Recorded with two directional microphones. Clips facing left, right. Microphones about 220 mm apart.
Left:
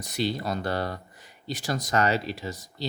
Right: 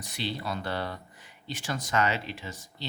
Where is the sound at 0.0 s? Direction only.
40° left (ahead or behind).